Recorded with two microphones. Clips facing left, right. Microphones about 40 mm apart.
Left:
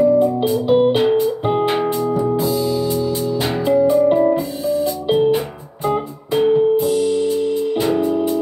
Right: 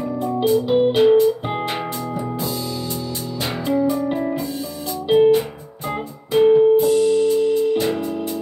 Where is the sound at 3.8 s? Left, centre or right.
Centre.